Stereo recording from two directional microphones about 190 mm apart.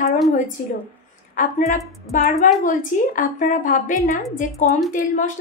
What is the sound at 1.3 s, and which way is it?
A woman's voice, 40° left (ahead or behind).